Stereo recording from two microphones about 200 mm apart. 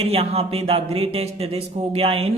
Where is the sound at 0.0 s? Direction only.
30° right (ahead or behind).